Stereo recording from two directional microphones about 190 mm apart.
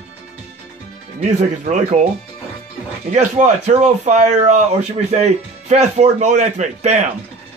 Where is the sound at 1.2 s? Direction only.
40° right (ahead or behind).